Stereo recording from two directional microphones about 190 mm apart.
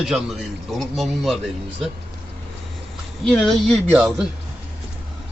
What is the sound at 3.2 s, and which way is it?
A man's voice, centre (ahead or behind).